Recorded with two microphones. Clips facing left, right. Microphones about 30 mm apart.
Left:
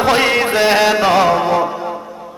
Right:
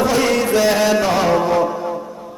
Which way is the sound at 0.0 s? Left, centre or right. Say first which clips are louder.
Left 3 dB; left.